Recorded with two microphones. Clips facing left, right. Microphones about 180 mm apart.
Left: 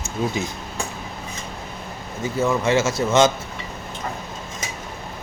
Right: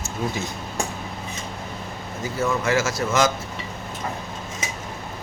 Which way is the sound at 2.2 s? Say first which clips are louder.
Left 3 dB; 25° left (ahead or behind).